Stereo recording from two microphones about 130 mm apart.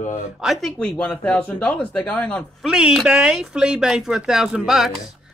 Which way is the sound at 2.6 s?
5° right (ahead or behind).